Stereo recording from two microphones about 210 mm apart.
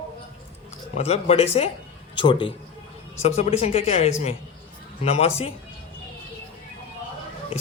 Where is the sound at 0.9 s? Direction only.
30° left (ahead or behind).